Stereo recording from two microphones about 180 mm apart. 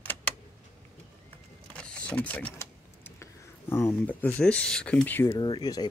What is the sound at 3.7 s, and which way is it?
Speech, 10° left (ahead or behind).